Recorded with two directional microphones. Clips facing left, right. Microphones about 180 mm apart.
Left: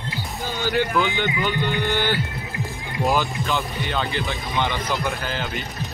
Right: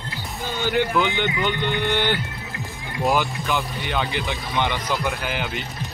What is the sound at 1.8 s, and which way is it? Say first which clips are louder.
Music: right 2 dB; 20° right (ahead or behind).